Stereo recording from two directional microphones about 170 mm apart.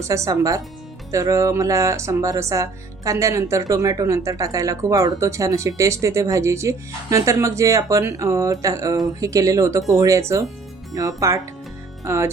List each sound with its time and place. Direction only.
0.0 s speech: 20° right (ahead or behind)